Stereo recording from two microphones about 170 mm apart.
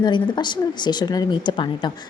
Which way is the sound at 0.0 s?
25° left (ahead or behind).